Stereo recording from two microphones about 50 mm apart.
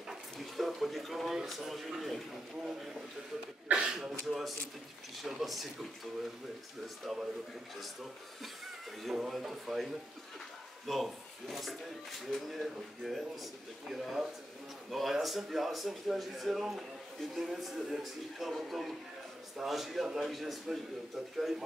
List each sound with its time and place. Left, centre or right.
0.1 s speech: centre
3.6 s speech: centre
4.3 s speech: centre
7.8 s speech: centre
10.9 s speech: centre